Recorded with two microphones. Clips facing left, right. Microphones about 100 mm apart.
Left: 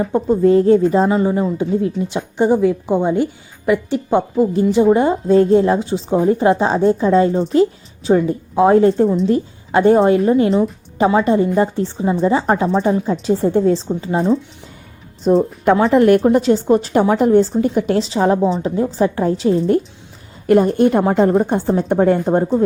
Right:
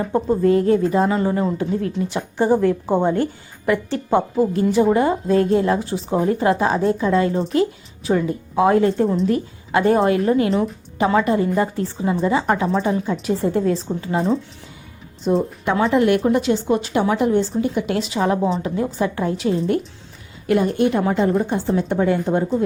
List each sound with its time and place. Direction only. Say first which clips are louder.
0.3 s speech: left 5 dB; 25° left (ahead or behind)
1.2 s a woman's voice: left 3 dB; 15° left (ahead or behind)
14.2 s speech: left 4 dB; centre (ahead or behind)
15.6 s a woman's voice: left 5 dB; 35° left (ahead or behind)